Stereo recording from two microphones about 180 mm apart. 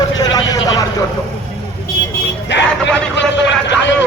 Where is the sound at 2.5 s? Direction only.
75° left (ahead or behind).